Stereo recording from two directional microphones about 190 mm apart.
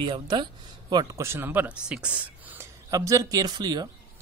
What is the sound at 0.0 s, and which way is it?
Speech, 25° right (ahead or behind).